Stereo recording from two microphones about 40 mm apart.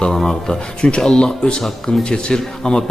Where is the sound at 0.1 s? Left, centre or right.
Centre.